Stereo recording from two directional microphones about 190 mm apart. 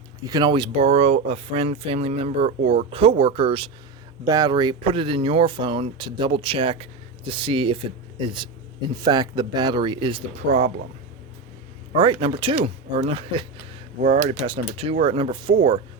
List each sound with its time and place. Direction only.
0.3 s speech: 20° right (ahead or behind)
12.2 s speech: 25° right (ahead or behind)
14.0 s speech: 45° right (ahead or behind)
14.4 s speech: 30° right (ahead or behind)